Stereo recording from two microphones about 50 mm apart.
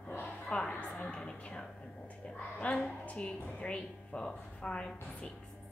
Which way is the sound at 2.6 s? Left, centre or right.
Left.